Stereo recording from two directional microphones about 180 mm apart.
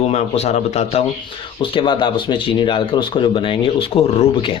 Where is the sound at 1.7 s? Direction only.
25° left (ahead or behind).